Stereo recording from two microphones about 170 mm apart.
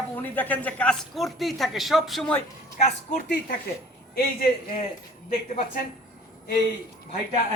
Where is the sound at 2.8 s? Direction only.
45° left (ahead or behind).